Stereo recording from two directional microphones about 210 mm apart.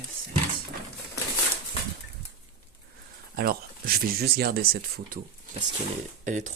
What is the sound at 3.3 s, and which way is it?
Speech, 45° right (ahead or behind).